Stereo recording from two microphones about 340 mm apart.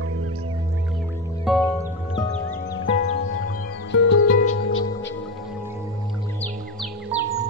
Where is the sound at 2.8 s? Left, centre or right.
Left.